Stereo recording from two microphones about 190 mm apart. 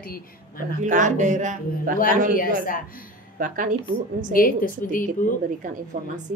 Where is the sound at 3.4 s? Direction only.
45° right (ahead or behind).